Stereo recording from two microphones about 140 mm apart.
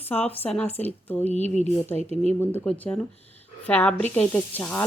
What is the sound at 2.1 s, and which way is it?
Speech, 50° right (ahead or behind).